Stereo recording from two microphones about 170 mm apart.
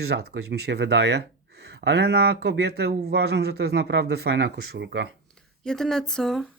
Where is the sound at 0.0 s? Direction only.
70° right (ahead or behind).